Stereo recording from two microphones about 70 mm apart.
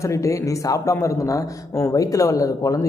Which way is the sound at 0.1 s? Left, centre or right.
Left.